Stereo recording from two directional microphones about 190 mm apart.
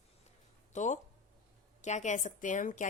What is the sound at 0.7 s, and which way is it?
Speech, 40° left (ahead or behind).